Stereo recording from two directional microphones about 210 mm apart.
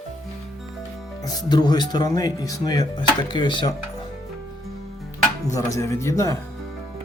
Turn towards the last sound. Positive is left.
turn(degrees=15)  # may be behind; listen again after turning